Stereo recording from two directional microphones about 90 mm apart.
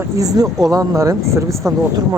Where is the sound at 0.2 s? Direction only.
40° right (ahead or behind).